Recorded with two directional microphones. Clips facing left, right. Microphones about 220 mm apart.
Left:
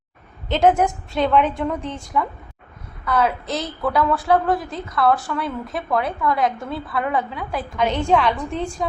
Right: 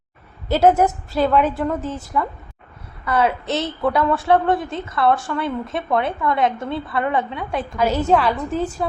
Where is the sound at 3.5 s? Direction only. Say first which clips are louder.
Right 3 dB; 30° right (ahead or behind).